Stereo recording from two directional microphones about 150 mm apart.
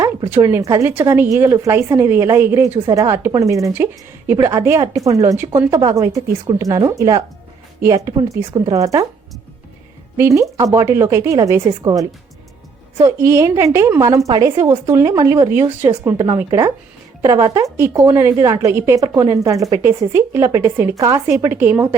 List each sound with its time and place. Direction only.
0.3 s a woman's voice: 15° right (ahead or behind)
10.2 s a woman's voice: 20° right (ahead or behind)